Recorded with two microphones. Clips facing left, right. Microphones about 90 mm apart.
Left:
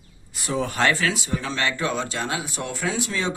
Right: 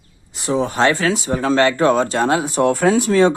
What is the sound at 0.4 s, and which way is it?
Speech, 25° right (ahead or behind).